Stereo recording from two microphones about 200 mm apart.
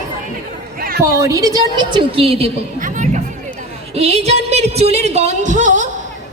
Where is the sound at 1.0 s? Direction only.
15° right (ahead or behind).